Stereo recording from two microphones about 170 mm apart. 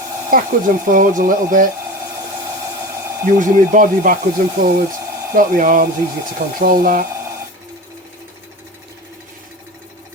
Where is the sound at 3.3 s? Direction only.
50° right (ahead or behind).